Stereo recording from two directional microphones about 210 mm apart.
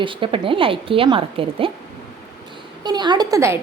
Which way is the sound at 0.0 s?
25° right (ahead or behind).